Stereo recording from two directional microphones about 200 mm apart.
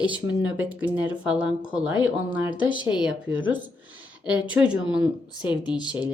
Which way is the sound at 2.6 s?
25° left (ahead or behind).